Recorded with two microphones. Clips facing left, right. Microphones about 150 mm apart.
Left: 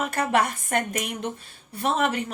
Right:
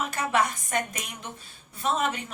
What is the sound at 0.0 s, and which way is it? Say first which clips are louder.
A woman's voice: left 3 dB; 55° left (ahead or behind).